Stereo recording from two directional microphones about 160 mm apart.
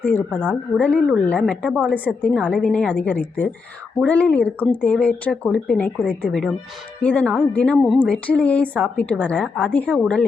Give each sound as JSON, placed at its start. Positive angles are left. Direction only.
{"t": 0.0, "sound": "speech", "side_deg": 10}
{"t": 8.6, "sound": "a woman's voice", "side_deg": -10}
{"t": 9.0, "sound": "speech", "side_deg": 5}